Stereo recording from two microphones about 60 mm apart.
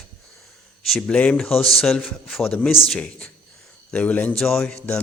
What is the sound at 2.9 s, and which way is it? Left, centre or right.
A man's voice, centre.